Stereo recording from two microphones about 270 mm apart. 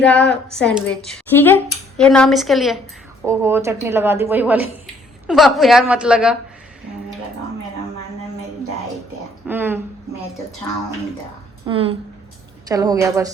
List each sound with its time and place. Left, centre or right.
0.0 s a woman's voice: centre
9.5 s speech: centre
11.7 s a woman's voice: right